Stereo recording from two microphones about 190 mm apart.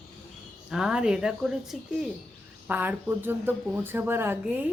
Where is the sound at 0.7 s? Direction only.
5° right (ahead or behind).